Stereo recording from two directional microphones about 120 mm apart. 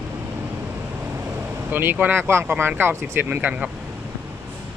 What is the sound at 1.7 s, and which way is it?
Speech, 15° right (ahead or behind).